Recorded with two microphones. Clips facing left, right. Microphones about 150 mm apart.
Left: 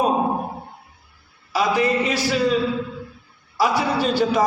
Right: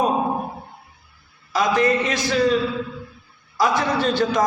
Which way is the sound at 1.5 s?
10° left (ahead or behind).